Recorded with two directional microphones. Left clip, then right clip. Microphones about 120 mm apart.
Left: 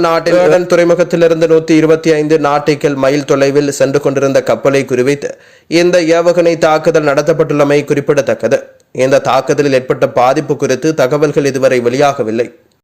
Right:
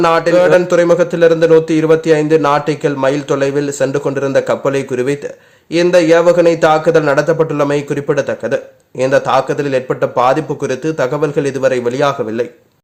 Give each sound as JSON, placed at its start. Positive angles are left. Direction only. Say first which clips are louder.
{"t": 0.0, "sound": "a man's voice", "louder": "left 1 dB", "side_deg": 25}